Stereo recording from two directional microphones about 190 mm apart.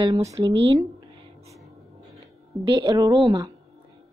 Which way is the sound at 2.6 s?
25° right (ahead or behind).